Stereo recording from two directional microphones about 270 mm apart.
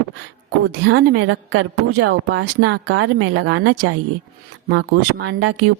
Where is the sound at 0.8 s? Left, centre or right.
Right.